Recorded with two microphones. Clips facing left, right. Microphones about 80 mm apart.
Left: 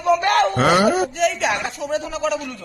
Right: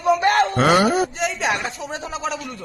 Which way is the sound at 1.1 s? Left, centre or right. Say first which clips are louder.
Left 3 dB; right.